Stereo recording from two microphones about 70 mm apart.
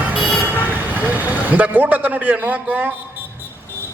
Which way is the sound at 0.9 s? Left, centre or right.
Right.